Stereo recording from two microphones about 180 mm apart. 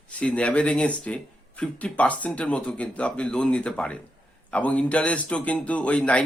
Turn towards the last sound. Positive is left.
turn(degrees=5)  # may be behind; listen again after turning